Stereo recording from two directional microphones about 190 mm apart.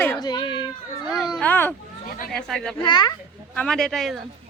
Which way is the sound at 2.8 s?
25° left (ahead or behind).